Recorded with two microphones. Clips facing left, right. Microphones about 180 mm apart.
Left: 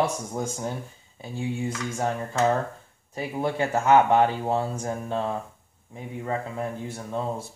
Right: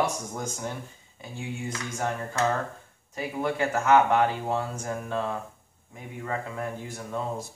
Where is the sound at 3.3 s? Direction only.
30° left (ahead or behind).